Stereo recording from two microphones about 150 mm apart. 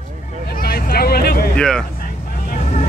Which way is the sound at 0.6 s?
90° left.